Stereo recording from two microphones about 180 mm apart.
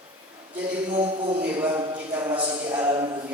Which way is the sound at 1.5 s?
25° right (ahead or behind).